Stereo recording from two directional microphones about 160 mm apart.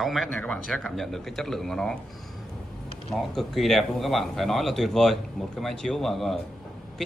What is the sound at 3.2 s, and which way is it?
Speech, centre (ahead or behind).